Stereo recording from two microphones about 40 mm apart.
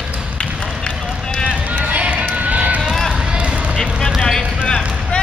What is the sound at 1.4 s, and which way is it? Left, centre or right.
Run, right.